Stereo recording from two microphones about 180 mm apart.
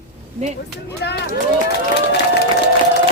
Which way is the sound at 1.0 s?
70° left (ahead or behind).